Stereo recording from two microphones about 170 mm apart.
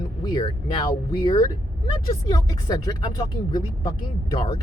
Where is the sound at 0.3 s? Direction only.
25° left (ahead or behind).